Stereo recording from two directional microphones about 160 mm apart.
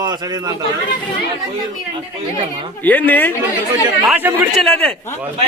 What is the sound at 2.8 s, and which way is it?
Speech, 10° left (ahead or behind).